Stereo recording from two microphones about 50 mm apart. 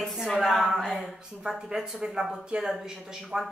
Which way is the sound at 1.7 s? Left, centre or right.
Centre.